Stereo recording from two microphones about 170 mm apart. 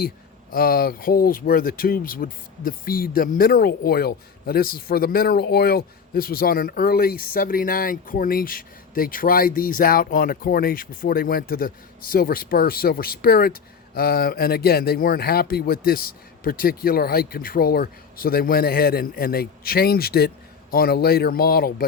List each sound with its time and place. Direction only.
0.5 s speech: 60° left (ahead or behind)